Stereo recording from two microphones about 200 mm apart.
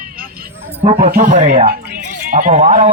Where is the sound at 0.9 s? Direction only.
45° right (ahead or behind).